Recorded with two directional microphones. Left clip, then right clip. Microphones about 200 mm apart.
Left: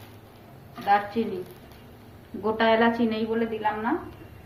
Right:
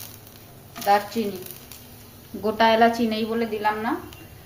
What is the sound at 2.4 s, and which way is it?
A woman's voice, 50° right (ahead or behind).